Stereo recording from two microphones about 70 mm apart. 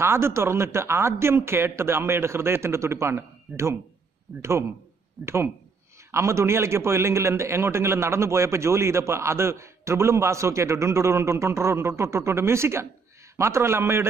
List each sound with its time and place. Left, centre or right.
0.0 s a man's voice: right